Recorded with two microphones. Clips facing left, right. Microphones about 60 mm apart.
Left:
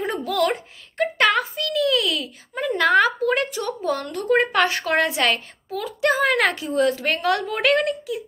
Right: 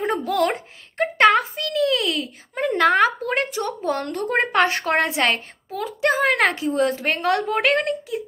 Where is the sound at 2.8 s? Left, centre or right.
Right.